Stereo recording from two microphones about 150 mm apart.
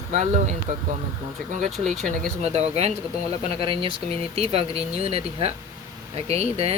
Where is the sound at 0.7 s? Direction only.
50° right (ahead or behind).